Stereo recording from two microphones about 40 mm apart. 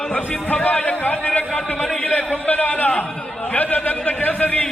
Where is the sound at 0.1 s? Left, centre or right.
Left.